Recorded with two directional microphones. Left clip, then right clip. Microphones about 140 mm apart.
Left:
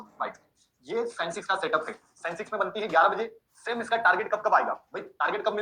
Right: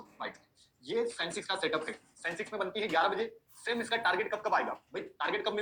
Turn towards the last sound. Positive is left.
turn(degrees=-35)  # may be behind; listen again after turning